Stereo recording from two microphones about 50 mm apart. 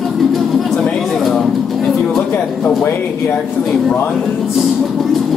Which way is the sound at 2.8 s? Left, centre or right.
Left.